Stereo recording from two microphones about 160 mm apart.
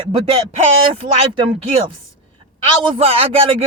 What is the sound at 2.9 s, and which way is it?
Speech, 35° right (ahead or behind).